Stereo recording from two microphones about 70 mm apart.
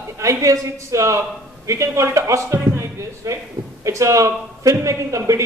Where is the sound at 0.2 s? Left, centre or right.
Right.